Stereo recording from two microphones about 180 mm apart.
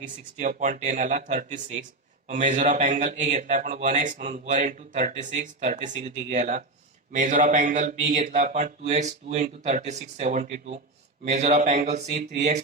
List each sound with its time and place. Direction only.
0.3 s a man's voice: 45° right (ahead or behind)